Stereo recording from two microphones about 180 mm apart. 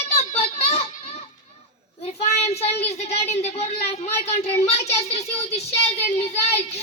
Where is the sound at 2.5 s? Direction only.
35° left (ahead or behind).